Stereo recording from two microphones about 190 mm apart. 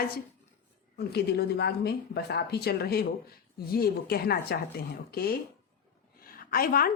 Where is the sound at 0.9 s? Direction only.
60° left (ahead or behind).